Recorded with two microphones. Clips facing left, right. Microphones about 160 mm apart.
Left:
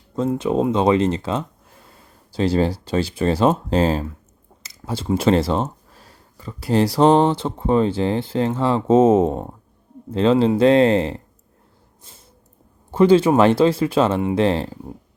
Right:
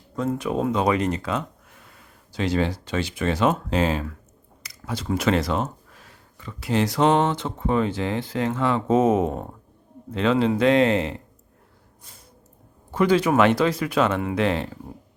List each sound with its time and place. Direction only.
0.3 s speech: 25° left (ahead or behind)
12.9 s speech: 30° left (ahead or behind)